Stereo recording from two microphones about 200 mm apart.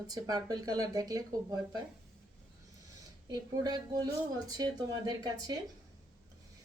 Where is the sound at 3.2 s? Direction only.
20° right (ahead or behind).